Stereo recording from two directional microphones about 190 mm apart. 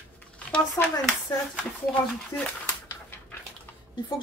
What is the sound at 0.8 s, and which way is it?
Speech, 15° left (ahead or behind).